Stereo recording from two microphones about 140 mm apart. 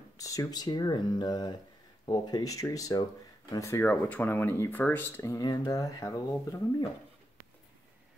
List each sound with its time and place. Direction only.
0.2 s speech: 25° left (ahead or behind)
3.8 s speech: 10° left (ahead or behind)